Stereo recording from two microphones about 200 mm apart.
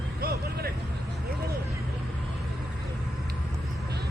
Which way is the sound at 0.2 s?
50° right (ahead or behind).